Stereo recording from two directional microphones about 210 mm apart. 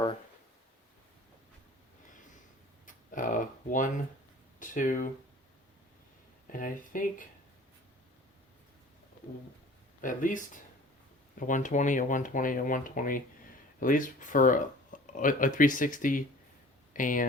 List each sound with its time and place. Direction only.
2.8 s a sound: 40° left (ahead or behind)
4.6 s speech: 40° left (ahead or behind)
6.5 s speech: 40° left (ahead or behind)
10.0 s speech: 40° left (ahead or behind)